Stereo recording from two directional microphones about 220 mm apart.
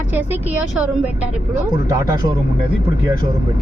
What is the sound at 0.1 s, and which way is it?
A woman's voice, 10° right (ahead or behind).